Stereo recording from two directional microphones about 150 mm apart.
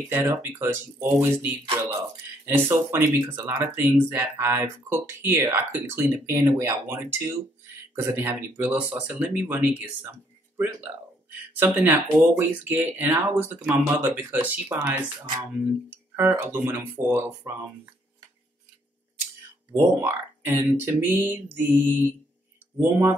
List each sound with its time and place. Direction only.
0.1 s speech: 15° right (ahead or behind)
11.6 s speech: 15° right (ahead or behind)
16.2 s speech: 15° right (ahead or behind)
19.7 s speech: 15° right (ahead or behind)